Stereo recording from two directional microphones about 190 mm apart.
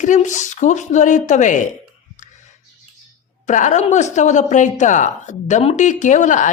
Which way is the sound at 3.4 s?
40° left (ahead or behind).